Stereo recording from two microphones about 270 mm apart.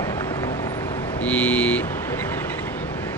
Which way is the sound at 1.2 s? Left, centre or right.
Centre.